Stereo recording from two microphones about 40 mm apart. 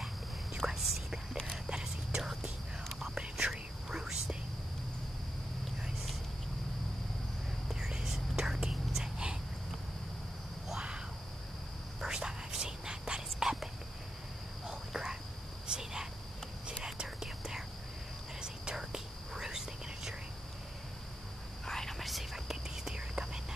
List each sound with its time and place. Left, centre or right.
0.6 s whispering: centre
7.9 s whispering: centre
9.0 s a sound: centre
10.7 s cricket: right
12.0 s whispering: centre
14.7 s cricket: centre
16.6 s whispering: right
17.2 s whispering: centre
21.6 s whispering: centre
21.9 s whispering: centre
22.5 s whispering: centre